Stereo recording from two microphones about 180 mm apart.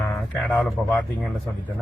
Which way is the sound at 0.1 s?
Centre (ahead or behind).